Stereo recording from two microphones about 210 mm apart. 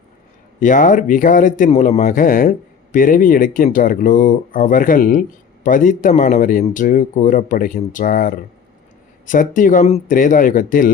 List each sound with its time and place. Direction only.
0.6 s speech: 40° left (ahead or behind)